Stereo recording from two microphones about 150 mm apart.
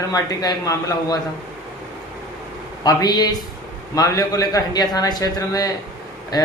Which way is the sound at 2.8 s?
25° left (ahead or behind).